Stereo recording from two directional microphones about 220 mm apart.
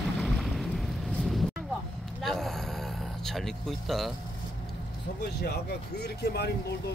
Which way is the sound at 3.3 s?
Centre (ahead or behind).